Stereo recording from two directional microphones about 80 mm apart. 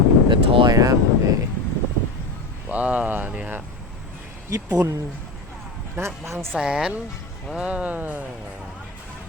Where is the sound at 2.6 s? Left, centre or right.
Centre.